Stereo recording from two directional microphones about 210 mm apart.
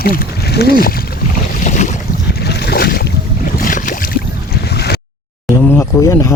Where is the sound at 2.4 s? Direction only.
50° left (ahead or behind).